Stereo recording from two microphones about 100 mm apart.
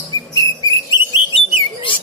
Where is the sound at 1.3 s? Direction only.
60° left (ahead or behind).